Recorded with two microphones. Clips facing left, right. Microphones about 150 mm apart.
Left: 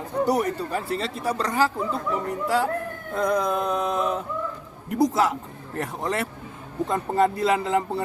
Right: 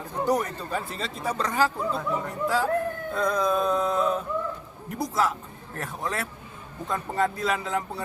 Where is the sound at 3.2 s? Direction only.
15° left (ahead or behind).